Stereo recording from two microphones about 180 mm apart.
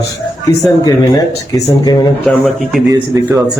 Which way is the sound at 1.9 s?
20° left (ahead or behind).